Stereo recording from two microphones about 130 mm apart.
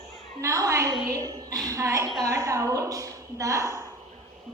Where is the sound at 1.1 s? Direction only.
25° right (ahead or behind).